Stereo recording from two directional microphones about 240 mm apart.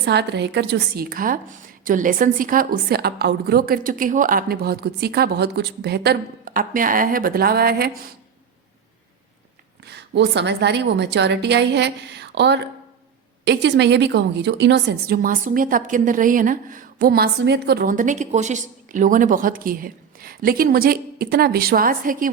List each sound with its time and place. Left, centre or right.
0.0 s a woman's voice: right
9.8 s a woman's voice: right